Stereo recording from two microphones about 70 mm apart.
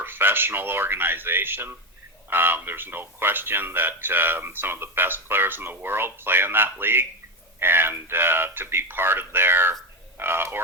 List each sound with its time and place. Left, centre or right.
0.0 s speech: right